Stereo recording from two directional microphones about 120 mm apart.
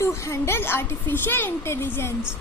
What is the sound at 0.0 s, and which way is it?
A woman's voice, 25° left (ahead or behind).